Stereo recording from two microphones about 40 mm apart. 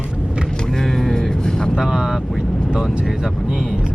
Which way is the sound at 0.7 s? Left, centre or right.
Centre.